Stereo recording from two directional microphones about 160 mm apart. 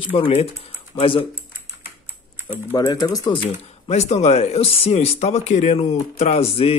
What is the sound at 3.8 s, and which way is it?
Speech, 40° left (ahead or behind).